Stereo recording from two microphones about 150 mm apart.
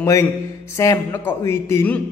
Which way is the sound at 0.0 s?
20° left (ahead or behind).